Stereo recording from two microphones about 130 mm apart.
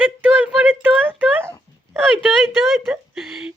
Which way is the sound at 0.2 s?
10° right (ahead or behind).